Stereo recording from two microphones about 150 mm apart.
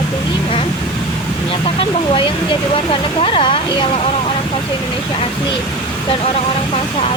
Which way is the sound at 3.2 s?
35° left (ahead or behind).